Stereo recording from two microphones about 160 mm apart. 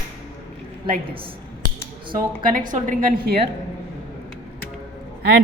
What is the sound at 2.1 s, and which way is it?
A woman's voice, 60° right (ahead or behind).